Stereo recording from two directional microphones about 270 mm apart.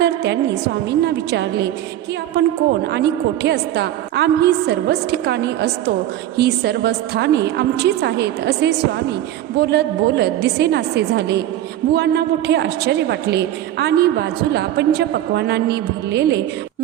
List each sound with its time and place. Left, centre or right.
0.0 s a woman's voice: right
2.9 s a woman's voice: right